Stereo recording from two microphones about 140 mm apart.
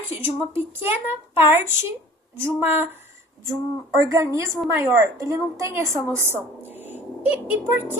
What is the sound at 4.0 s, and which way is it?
A woman's voice, 25° right (ahead or behind).